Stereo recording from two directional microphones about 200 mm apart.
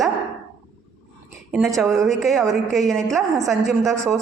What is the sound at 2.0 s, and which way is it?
A woman's voice, centre (ahead or behind).